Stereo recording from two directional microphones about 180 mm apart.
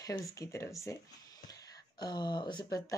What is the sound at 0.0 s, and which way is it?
Speech, 20° left (ahead or behind).